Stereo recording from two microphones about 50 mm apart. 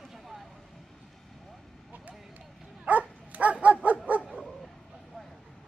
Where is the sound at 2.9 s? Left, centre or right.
Right.